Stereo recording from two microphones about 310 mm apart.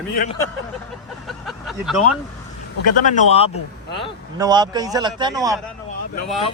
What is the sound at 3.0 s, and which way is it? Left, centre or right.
Speech, left.